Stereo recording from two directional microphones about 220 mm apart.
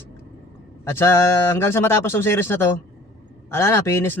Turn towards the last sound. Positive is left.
turn(degrees=10)  # may be behind; listen again after turning